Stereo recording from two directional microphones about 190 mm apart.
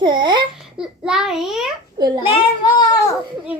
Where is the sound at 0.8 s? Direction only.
5° right (ahead or behind).